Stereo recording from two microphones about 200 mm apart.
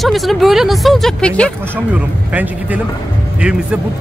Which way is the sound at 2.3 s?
10° right (ahead or behind).